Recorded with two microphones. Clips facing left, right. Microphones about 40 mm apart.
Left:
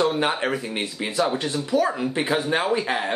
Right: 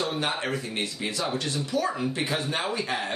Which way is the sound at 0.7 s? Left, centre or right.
Centre.